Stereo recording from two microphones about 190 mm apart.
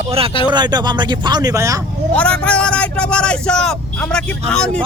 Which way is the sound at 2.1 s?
5° left (ahead or behind).